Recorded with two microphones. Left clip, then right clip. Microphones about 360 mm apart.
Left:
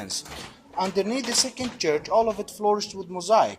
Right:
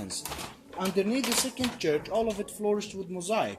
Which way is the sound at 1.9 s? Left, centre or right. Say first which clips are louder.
Left 7 dB; left.